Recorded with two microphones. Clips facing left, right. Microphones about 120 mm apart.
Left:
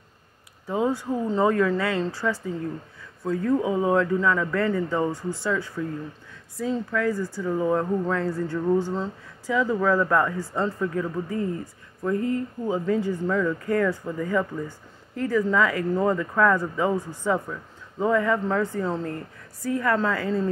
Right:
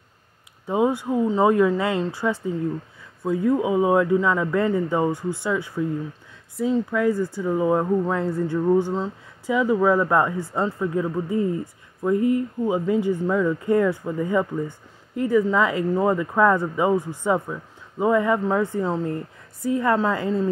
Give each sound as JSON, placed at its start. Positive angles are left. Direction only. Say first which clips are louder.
{"t": 0.7, "sound": "speech", "louder": "right 3 dB", "side_deg": -20}
{"t": 6.9, "sound": "speech", "louder": "right 4 dB", "side_deg": -15}